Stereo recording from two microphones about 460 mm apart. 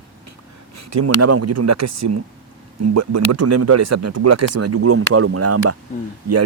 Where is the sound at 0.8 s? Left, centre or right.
Right.